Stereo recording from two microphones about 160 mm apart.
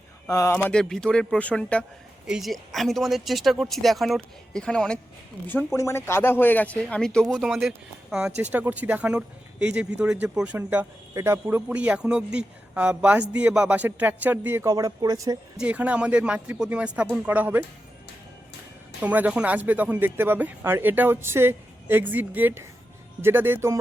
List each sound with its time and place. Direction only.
0.3 s speech: 20° left (ahead or behind)
0.7 s speech: 5° left (ahead or behind); by 15.4 s 20° right (ahead or behind)
15.5 s speech: 10° right (ahead or behind)
19.0 s speech: 10° right (ahead or behind)